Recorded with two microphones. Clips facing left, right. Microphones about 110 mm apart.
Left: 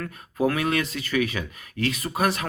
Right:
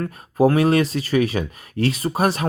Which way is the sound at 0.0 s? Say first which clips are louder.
Right 7 dB; 35° right (ahead or behind).